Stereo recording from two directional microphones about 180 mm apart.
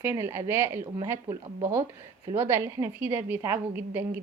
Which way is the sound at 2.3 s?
10° right (ahead or behind).